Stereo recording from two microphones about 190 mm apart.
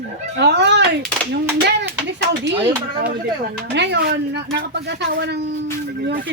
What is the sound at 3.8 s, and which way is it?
Speech, 65° right (ahead or behind).